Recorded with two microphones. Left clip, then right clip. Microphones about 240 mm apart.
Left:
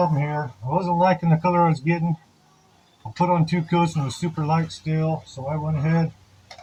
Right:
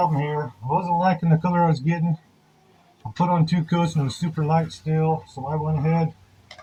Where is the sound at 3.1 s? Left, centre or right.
Centre.